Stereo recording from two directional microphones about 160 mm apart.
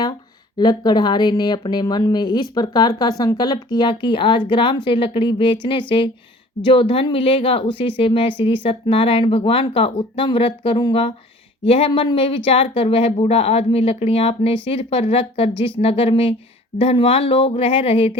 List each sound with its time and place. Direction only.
0.6 s speech: 25° left (ahead or behind)